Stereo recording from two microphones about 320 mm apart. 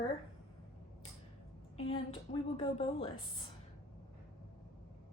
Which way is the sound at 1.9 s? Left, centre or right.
Centre.